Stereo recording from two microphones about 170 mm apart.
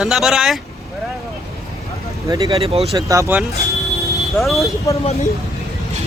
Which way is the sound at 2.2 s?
20° right (ahead or behind).